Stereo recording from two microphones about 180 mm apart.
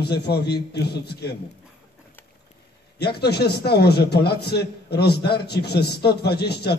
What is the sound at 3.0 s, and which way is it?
A man's voice, 65° left (ahead or behind).